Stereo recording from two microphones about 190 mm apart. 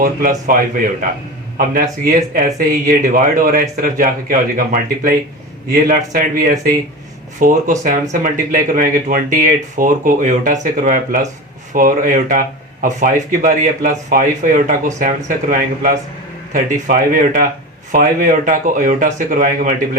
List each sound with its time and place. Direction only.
0.0 s speech: 45° right (ahead or behind)